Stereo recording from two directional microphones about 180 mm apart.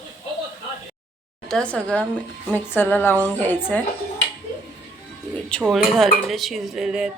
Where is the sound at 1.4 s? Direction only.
5° left (ahead or behind).